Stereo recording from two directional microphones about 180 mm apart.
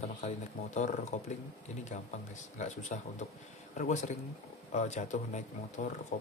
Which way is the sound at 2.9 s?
45° left (ahead or behind).